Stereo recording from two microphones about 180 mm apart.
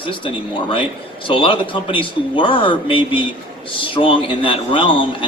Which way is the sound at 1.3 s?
30° left (ahead or behind).